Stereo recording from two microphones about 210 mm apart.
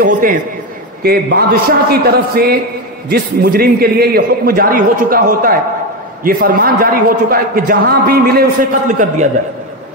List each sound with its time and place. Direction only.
0.0 s a man's voice: 40° right (ahead or behind)